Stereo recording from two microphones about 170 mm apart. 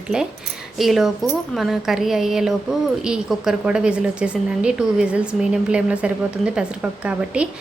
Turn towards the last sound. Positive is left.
turn(degrees=-5)  # may be behind; listen again after turning